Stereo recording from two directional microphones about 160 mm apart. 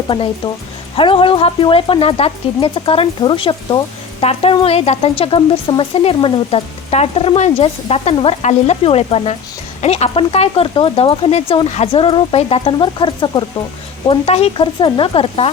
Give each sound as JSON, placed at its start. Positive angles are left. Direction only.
{"t": 0.1, "sound": "speech", "side_deg": 30}
{"t": 14.1, "sound": "speech", "side_deg": 40}